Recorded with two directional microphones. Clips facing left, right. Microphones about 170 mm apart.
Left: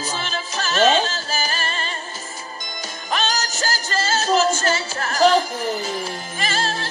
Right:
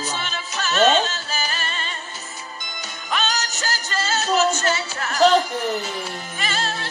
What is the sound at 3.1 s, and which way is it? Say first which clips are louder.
Music: left 1 dB; 40° left (ahead or behind).